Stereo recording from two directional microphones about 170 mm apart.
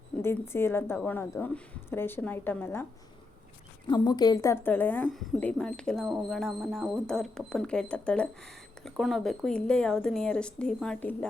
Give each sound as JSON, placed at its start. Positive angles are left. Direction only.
{"t": 0.2, "sound": "a woman's voice", "side_deg": 15}
{"t": 3.8, "sound": "a woman's voice", "side_deg": 25}